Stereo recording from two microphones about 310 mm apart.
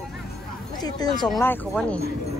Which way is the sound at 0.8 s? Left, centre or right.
Centre.